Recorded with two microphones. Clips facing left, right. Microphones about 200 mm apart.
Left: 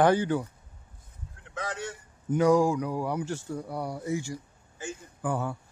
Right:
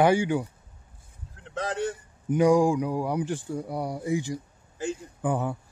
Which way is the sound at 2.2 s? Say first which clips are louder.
Right 2 dB; 15° right (ahead or behind).